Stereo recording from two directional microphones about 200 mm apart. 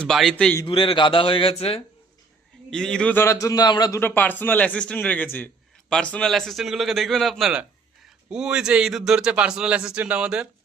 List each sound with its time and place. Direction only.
0.0 s a man's voice: centre (ahead or behind)
0.6 s speech: 25° left (ahead or behind)
2.6 s a man's voice: 5° left (ahead or behind)